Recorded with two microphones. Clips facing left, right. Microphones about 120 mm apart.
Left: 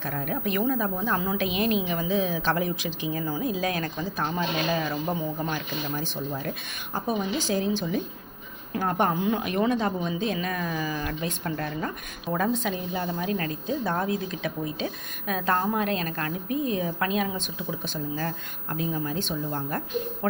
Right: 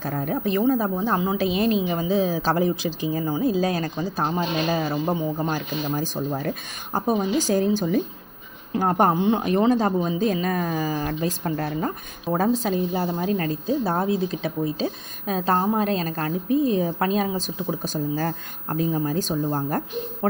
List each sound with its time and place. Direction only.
0.0 s a woman's voice: 35° right (ahead or behind)
1.4 s speech: 35° right (ahead or behind)